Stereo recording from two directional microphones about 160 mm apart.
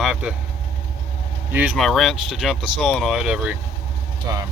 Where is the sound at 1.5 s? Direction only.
10° right (ahead or behind).